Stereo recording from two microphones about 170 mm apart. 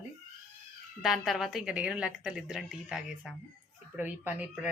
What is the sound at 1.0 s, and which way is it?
A woman's voice, centre (ahead or behind).